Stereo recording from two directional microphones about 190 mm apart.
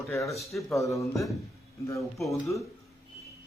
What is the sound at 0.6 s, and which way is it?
Speech, 15° left (ahead or behind).